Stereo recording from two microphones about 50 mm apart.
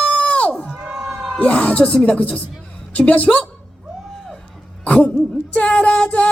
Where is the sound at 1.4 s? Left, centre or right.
Left.